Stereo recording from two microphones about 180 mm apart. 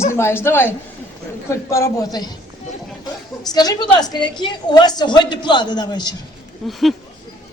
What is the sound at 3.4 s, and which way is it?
A woman's voice, 20° left (ahead or behind).